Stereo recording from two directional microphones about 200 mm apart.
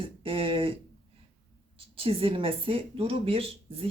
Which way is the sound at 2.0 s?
30° right (ahead or behind).